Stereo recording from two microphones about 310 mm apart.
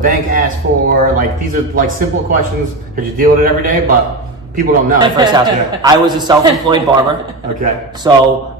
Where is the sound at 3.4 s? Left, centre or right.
Right.